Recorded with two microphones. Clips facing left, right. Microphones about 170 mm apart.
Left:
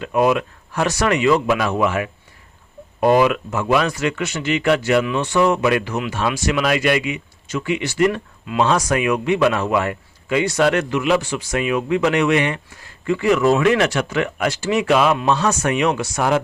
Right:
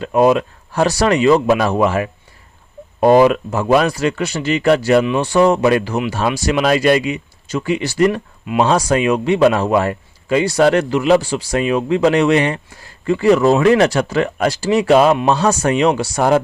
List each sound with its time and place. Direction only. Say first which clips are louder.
0.0 s speech: right 4 dB; 30° right (ahead or behind)